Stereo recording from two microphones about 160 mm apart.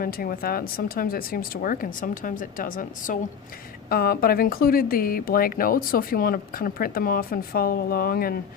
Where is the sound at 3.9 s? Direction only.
70° left (ahead or behind).